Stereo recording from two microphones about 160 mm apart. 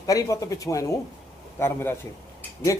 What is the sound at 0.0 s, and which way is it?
A man's voice, 20° left (ahead or behind).